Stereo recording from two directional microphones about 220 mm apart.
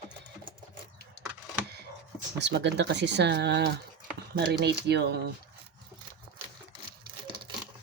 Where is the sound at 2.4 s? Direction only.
50° right (ahead or behind).